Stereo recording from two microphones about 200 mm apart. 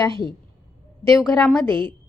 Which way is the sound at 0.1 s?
25° right (ahead or behind).